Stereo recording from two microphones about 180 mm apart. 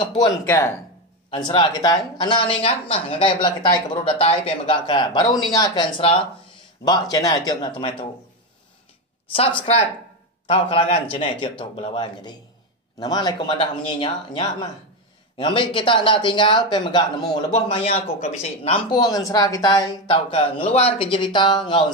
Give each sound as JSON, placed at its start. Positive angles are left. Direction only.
{"t": 0.0, "sound": "speech", "side_deg": 30}
{"t": 0.5, "sound": "speech", "side_deg": 15}
{"t": 1.3, "sound": "speech", "side_deg": 30}
{"t": 9.3, "sound": "speech", "side_deg": 30}